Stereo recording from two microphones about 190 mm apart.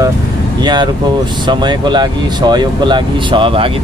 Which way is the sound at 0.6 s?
20° right (ahead or behind).